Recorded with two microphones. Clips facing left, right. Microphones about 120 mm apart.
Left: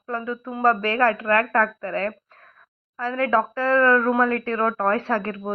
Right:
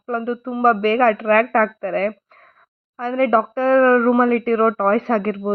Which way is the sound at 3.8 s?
45° right (ahead or behind).